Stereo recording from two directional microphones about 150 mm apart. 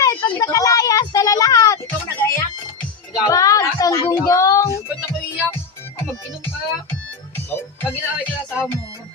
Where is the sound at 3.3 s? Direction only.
20° left (ahead or behind).